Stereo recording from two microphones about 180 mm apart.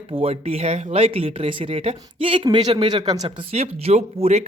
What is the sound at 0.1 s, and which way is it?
Speech, 30° right (ahead or behind).